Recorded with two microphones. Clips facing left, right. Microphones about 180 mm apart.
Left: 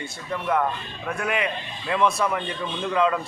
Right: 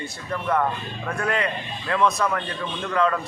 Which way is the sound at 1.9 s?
25° left (ahead or behind).